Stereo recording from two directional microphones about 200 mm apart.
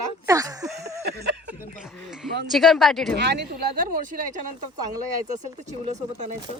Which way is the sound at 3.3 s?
45° right (ahead or behind).